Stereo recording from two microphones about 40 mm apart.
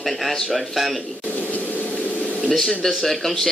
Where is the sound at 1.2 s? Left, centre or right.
Left.